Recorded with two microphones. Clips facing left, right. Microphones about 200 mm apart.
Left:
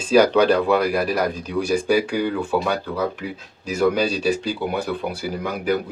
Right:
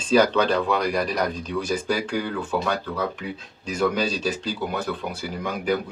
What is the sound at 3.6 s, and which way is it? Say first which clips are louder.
Speech: left 4 dB; 10° left (ahead or behind).